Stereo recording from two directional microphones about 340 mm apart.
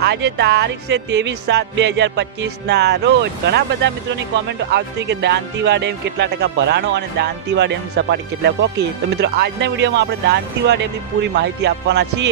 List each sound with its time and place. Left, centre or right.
0.0 s speech: right
11.3 s music: right